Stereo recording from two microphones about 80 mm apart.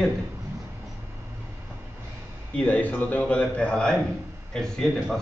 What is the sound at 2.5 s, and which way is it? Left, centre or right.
A man's voice, centre.